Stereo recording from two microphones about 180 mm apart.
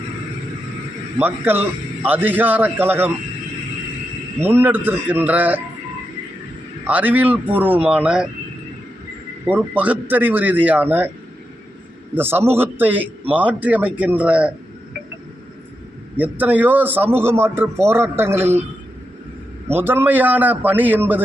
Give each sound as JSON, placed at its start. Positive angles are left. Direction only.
{"t": 1.2, "sound": "a man's voice", "side_deg": -10}
{"t": 4.4, "sound": "a man's voice", "side_deg": -10}
{"t": 6.8, "sound": "a man's voice", "side_deg": -10}
{"t": 9.5, "sound": "a man's voice", "side_deg": -10}
{"t": 12.1, "sound": "a man's voice", "side_deg": -10}
{"t": 16.1, "sound": "a man's voice", "side_deg": -10}
{"t": 19.6, "sound": "a man's voice", "side_deg": -10}